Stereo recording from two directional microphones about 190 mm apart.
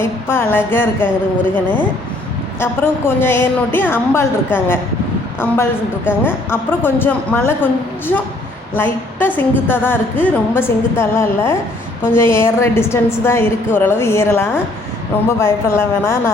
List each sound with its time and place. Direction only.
0.0 s a woman's voice: 10° left (ahead or behind)
6.1 s a woman's voice: 10° left (ahead or behind)